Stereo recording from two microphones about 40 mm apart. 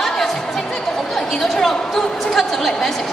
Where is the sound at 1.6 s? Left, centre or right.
Centre.